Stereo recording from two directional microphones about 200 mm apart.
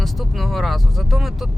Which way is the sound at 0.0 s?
Centre (ahead or behind).